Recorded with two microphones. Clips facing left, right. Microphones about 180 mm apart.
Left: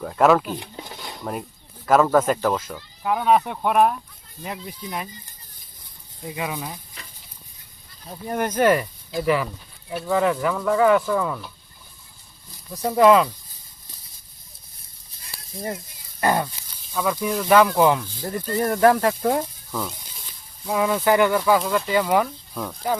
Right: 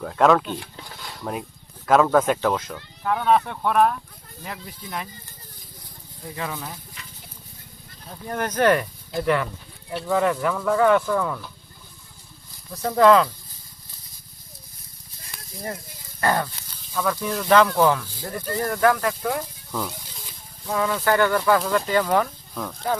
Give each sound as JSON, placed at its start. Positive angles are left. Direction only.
{"t": 0.0, "sound": "speech", "side_deg": 5}
{"t": 0.5, "sound": "a sound", "side_deg": 20}
{"t": 1.2, "sound": "speech", "side_deg": 0}
{"t": 6.2, "sound": "speech", "side_deg": 15}
{"t": 7.0, "sound": "goat", "side_deg": 35}
{"t": 8.1, "sound": "speech", "side_deg": 15}
{"t": 12.7, "sound": "speech", "side_deg": 10}
{"t": 15.3, "sound": "a sound", "side_deg": 30}
{"t": 16.2, "sound": "speech", "side_deg": 15}
{"t": 20.7, "sound": "speech", "side_deg": 15}